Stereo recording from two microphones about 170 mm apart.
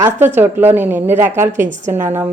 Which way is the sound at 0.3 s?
10° right (ahead or behind).